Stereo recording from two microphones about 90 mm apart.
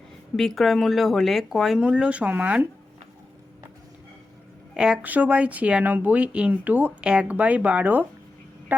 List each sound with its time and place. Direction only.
0.3 s speech: 5° left (ahead or behind); by 2.6 s 15° right (ahead or behind)
4.7 s speech: 10° right (ahead or behind)